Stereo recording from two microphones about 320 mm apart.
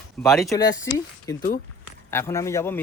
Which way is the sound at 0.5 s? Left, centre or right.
Centre.